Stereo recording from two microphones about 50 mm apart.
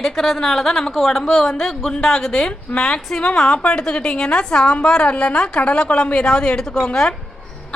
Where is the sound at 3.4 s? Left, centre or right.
Left.